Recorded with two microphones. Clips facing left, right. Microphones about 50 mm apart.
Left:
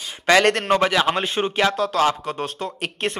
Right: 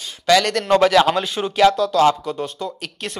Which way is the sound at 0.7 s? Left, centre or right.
Centre.